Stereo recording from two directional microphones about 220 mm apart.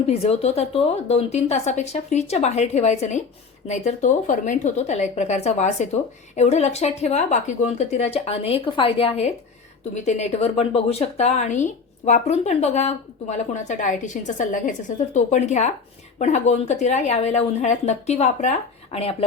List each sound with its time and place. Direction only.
0.1 s a woman's voice: 30° left (ahead or behind)